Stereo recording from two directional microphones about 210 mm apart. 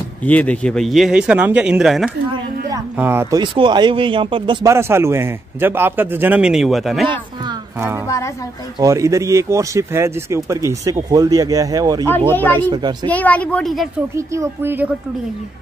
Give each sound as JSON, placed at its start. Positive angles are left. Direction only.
{"t": 0.2, "sound": "a man's voice", "side_deg": 5}
{"t": 4.7, "sound": "speech", "side_deg": -10}
{"t": 8.7, "sound": "speech", "side_deg": -15}
{"t": 13.1, "sound": "speech", "side_deg": 5}
{"t": 14.1, "sound": "speech", "side_deg": -15}